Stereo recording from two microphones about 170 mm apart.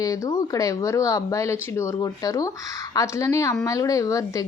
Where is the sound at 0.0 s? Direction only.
20° left (ahead or behind).